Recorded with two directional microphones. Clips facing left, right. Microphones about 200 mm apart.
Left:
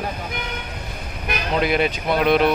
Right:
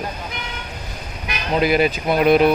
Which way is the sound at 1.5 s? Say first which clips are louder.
Right 3 dB; 5° right (ahead or behind).